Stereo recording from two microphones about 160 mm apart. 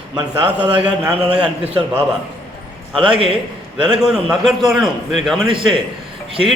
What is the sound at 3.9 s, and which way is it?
A man's voice, 5° right (ahead or behind).